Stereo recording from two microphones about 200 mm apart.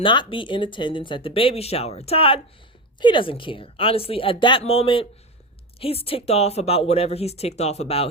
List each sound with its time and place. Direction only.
0.0 s speech: 25° left (ahead or behind)